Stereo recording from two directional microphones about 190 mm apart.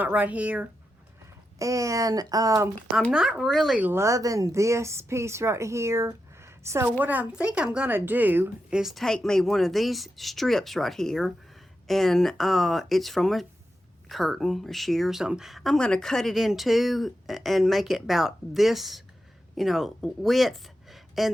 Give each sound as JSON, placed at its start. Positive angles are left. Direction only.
{"t": 0.0, "sound": "speech", "side_deg": -10}
{"t": 3.1, "sound": "speech", "side_deg": -5}